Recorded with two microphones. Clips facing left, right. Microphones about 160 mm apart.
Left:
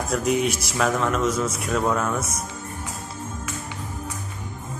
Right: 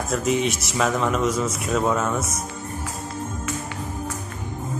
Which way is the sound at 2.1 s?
30° right (ahead or behind).